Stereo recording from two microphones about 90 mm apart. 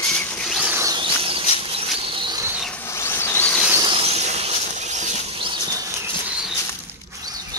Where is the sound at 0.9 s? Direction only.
90° right.